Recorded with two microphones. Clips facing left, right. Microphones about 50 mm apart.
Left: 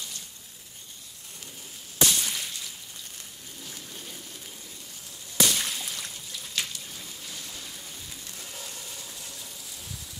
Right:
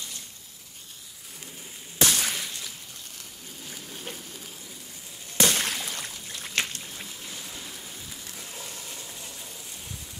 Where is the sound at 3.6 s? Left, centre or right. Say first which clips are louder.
Right 2 dB; centre.